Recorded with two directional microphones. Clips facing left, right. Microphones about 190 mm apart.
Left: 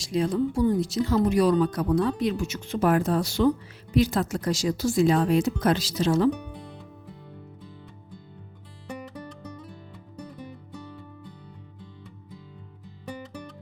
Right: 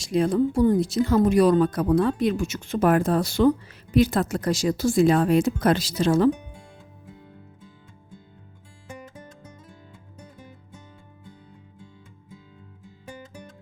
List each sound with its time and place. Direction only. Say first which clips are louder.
0.0 s speech: right 3 dB; 55° right (ahead or behind)